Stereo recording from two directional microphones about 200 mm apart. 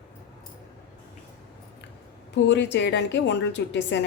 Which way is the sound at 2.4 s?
60° left (ahead or behind).